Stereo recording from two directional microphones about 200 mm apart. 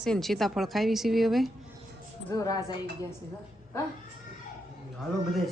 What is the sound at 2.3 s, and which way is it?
Speech, 15° left (ahead or behind).